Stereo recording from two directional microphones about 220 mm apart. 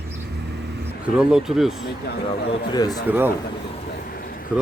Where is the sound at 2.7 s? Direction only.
15° left (ahead or behind).